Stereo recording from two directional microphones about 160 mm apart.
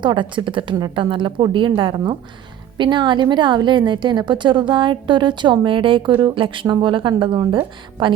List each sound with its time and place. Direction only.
0.0 s a woman's voice: 30° right (ahead or behind)